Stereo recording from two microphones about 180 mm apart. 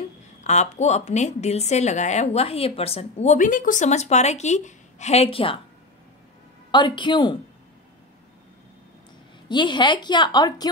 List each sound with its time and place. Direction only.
0.4 s speech: 40° left (ahead or behind)
6.7 s a woman's voice: 25° left (ahead or behind)
9.5 s a woman's voice: 25° left (ahead or behind)